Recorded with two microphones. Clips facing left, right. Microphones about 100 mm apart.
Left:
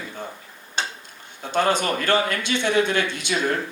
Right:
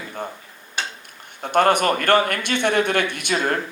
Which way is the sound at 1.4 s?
55° right (ahead or behind).